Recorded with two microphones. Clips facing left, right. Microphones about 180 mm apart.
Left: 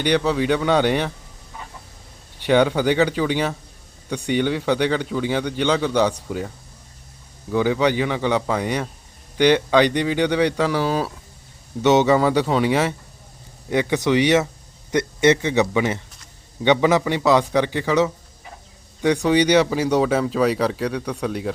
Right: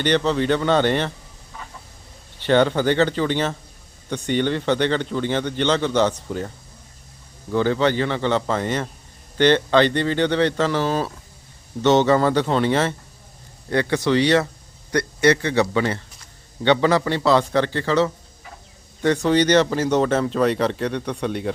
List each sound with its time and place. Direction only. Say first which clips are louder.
0.0 s speech: even; 10° left (ahead or behind)
2.4 s speech: even; 10° left (ahead or behind)
7.5 s speech: even; 10° left (ahead or behind)